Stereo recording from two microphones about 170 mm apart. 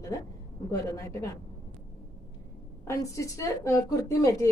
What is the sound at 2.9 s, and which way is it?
A woman's voice, 20° left (ahead or behind).